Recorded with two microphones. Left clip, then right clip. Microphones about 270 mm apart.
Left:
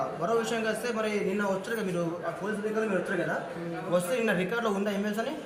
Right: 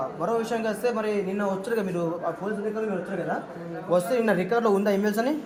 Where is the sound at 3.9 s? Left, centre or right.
Right.